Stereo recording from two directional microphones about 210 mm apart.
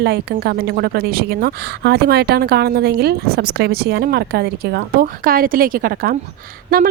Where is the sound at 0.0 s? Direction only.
50° right (ahead or behind).